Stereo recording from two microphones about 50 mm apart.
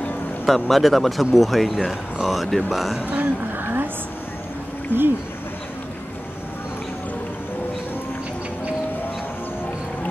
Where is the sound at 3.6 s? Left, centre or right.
Right.